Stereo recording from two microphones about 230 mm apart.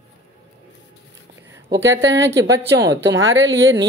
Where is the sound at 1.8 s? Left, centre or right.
Right.